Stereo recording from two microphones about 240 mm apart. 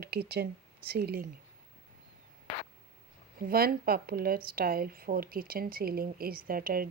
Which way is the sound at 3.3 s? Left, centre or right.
Right.